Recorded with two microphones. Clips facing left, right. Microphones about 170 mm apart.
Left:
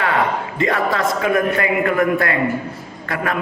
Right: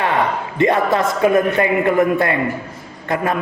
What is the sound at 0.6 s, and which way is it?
A man's voice, 25° right (ahead or behind).